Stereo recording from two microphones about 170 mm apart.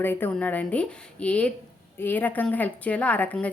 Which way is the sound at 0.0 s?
10° left (ahead or behind).